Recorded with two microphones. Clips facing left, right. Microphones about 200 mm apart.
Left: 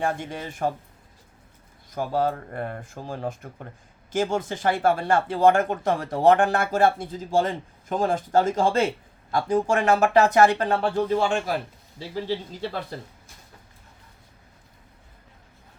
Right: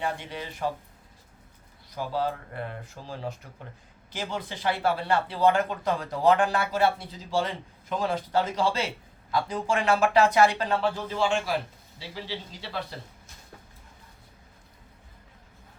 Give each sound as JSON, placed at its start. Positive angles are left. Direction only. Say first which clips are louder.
{"t": 0.0, "sound": "a man's voice", "louder": "left 4 dB", "side_deg": 45}
{"t": 2.0, "sound": "a man's voice", "louder": "left 5 dB", "side_deg": 50}